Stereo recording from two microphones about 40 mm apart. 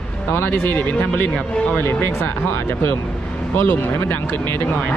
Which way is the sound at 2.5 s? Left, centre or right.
Left.